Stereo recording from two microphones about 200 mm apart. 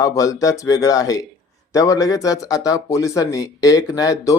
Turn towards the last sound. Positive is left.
turn(degrees=15)  # may be behind; listen again after turning